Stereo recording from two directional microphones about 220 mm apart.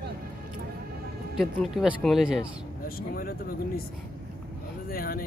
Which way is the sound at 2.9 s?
40° left (ahead or behind).